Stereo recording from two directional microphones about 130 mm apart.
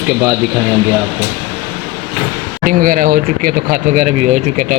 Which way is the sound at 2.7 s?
90° right.